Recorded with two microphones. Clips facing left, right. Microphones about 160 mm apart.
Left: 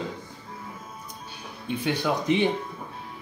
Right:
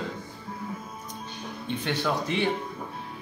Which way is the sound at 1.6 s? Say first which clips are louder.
Left 2 dB; 10° left (ahead or behind).